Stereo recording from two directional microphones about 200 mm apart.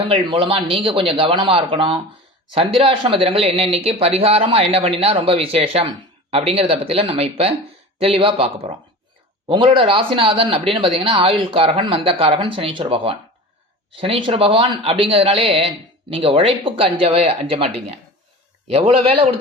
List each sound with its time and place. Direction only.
0.0 s a man's voice: 25° right (ahead or behind)